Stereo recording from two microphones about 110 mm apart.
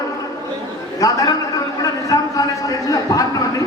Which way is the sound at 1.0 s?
35° left (ahead or behind).